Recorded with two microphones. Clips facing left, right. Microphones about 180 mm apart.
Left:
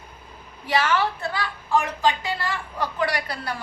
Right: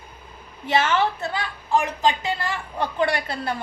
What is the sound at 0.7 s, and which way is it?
A woman's voice, 25° right (ahead or behind).